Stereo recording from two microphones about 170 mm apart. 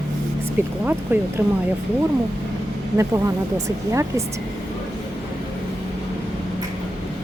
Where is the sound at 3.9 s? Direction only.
15° right (ahead or behind).